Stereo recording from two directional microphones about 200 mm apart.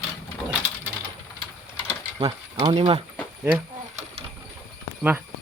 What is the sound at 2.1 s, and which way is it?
Speech, 25° right (ahead or behind).